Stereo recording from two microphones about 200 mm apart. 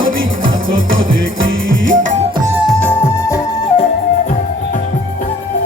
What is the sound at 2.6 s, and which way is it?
Flute, 10° left (ahead or behind).